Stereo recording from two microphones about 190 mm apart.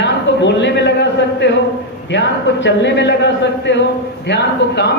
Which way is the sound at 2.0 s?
70° left (ahead or behind).